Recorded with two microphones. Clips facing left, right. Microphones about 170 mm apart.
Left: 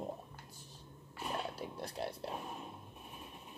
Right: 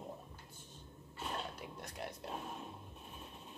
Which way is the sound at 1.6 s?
30° left (ahead or behind).